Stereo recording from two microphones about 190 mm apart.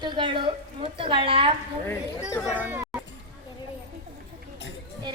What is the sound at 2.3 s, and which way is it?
Speech, 15° left (ahead or behind).